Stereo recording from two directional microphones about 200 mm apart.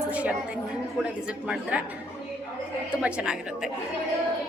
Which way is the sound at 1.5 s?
5° right (ahead or behind).